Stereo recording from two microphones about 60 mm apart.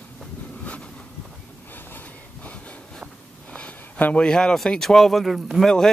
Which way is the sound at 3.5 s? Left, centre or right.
Left.